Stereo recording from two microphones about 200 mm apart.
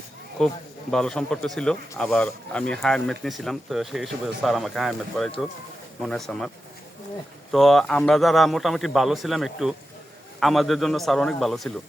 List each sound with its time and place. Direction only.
0.3 s speech: 5° left (ahead or behind)
7.5 s speech: centre (ahead or behind)